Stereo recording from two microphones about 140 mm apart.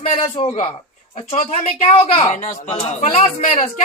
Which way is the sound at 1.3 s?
60° left (ahead or behind).